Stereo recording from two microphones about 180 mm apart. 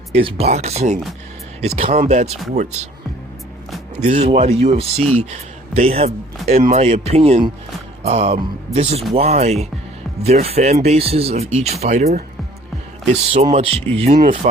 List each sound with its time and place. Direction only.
0.1 s speech: 30° right (ahead or behind)
4.0 s speech: 40° right (ahead or behind)
13.3 s speech: 35° right (ahead or behind)